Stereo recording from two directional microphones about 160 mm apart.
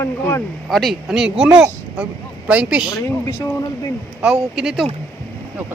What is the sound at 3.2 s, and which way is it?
Speech, 15° left (ahead or behind).